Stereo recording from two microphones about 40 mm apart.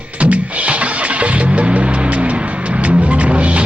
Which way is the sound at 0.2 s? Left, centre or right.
Right.